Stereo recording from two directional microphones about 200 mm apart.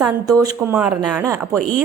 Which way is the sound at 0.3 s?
15° right (ahead or behind).